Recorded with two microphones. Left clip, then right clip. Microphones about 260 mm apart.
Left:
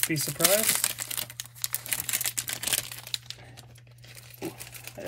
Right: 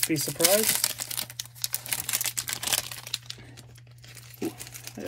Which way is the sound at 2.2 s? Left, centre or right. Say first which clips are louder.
Right 1 dB; centre.